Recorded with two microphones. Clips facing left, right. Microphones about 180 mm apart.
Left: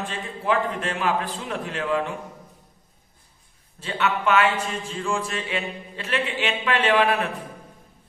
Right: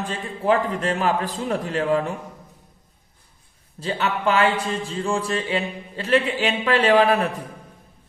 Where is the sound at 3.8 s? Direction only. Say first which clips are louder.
Right 1 dB; 35° right (ahead or behind).